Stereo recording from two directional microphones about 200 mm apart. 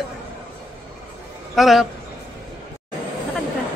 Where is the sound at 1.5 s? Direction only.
Centre (ahead or behind).